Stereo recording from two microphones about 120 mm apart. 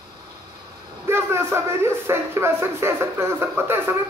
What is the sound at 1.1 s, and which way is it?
Speech, 20° right (ahead or behind).